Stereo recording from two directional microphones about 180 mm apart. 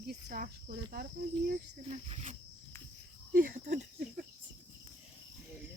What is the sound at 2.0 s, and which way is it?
Speech, 35° right (ahead or behind).